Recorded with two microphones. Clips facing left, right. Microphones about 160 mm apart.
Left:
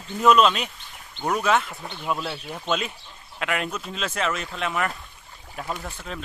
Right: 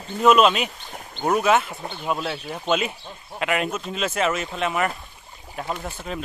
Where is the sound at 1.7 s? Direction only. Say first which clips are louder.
Right 3 dB; 25° right (ahead or behind).